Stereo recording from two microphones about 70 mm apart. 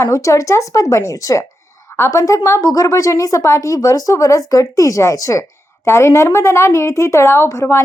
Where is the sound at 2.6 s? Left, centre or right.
Left.